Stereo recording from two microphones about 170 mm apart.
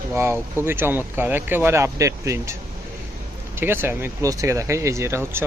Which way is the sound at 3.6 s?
15° right (ahead or behind).